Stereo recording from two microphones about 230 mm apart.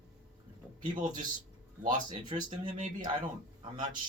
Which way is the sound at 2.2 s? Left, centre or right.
Centre.